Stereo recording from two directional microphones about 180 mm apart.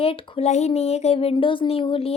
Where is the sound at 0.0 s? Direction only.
30° left (ahead or behind).